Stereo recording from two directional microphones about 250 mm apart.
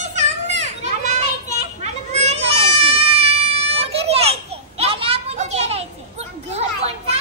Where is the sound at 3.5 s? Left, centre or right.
Right.